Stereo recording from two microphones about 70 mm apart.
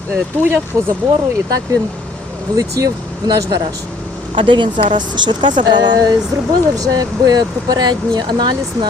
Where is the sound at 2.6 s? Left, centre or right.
Right.